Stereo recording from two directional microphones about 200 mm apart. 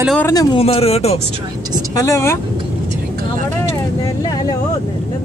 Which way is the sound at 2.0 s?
15° left (ahead or behind).